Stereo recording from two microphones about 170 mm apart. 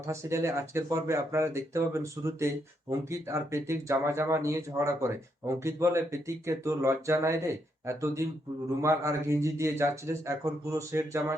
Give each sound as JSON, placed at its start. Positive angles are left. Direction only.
{"t": 0.1, "sound": "speech", "side_deg": -15}